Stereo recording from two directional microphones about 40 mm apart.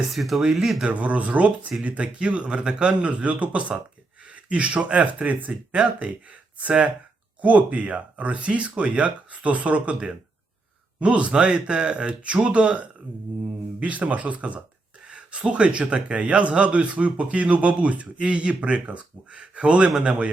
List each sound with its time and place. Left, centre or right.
0.0 s speech: centre
0.9 s speech: right